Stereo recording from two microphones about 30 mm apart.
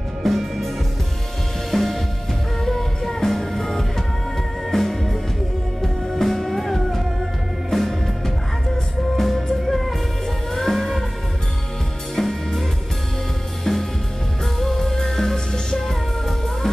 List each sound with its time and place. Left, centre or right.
0.2 s music: centre
1.7 s music: centre
9.2 s music: centre
12.2 s music: centre
13.7 s music: left
14.4 s music: centre